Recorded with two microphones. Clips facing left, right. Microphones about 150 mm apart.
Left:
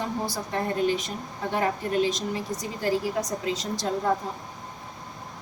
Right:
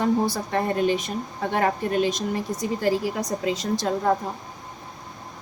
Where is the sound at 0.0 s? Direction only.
65° right (ahead or behind).